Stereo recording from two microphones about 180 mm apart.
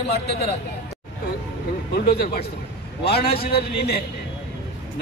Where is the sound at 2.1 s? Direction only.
60° left (ahead or behind).